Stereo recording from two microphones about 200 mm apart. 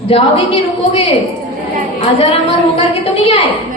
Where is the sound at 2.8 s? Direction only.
30° left (ahead or behind).